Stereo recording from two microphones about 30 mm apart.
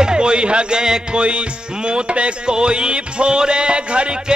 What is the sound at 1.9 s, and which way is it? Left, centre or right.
Music, right.